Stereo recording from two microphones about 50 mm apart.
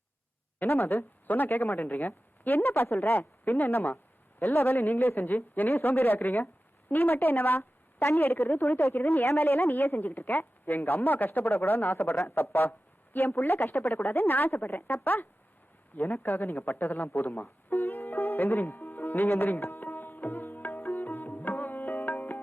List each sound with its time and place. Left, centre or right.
0.6 s speech: left
20.9 s tabla: left